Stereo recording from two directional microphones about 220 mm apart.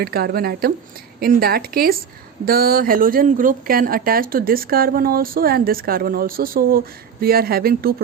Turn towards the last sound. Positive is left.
turn(degrees=-45)  # may be behind; listen again after turning